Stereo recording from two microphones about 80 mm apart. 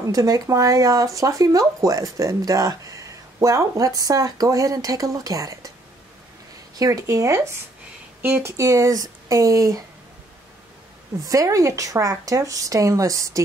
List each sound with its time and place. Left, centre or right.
0.0 s speech: right
6.8 s speech: right
8.2 s speech: right
11.2 s speech: right